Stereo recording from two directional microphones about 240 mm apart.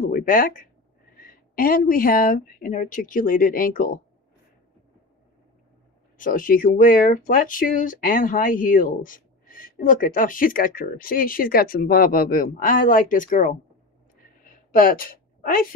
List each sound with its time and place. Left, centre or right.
0.0 s speech: left
6.1 s speech: left
14.7 s a sound: left